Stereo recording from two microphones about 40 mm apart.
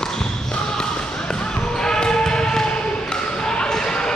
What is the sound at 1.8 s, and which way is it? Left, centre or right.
Basketball bounce, centre.